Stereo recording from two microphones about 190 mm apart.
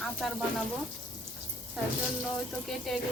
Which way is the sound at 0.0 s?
Centre (ahead or behind).